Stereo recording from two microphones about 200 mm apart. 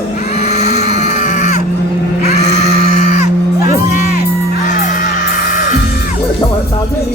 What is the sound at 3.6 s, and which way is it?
Music, 45° left (ahead or behind).